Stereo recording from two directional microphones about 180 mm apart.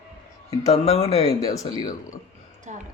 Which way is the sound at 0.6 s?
35° left (ahead or behind).